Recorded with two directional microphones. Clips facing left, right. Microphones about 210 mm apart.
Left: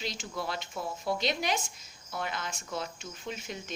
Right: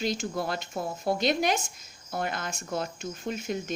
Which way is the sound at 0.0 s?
50° right (ahead or behind).